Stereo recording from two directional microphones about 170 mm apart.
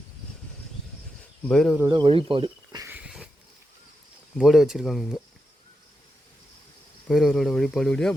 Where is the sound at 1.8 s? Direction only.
25° right (ahead or behind).